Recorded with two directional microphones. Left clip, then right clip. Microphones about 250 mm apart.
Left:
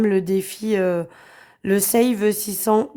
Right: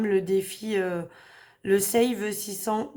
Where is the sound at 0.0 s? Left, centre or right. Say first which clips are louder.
Left 4 dB; left.